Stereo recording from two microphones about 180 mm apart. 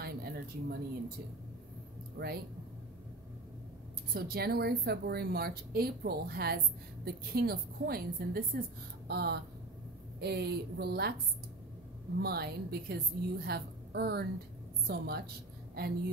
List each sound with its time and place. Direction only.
0.0 s a sound: 60° right (ahead or behind)
2.1 s speech: 60° right (ahead or behind)
4.1 s a woman's voice: 60° right (ahead or behind)
12.2 s a woman's voice: 60° right (ahead or behind)